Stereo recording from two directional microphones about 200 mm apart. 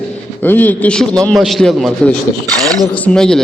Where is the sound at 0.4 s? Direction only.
10° left (ahead or behind).